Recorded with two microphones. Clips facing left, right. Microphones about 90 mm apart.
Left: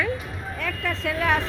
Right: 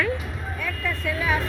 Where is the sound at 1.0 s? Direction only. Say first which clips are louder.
Left 2 dB; 85° left.